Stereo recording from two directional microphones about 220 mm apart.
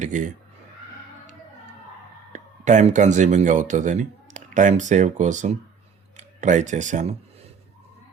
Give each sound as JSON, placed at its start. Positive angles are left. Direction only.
{"t": 0.0, "sound": "speech", "side_deg": -35}
{"t": 2.3, "sound": "speech", "side_deg": -35}